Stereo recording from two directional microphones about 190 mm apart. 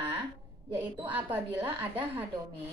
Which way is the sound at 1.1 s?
10° right (ahead or behind).